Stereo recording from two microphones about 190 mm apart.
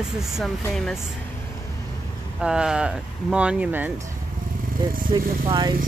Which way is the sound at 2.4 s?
5° right (ahead or behind).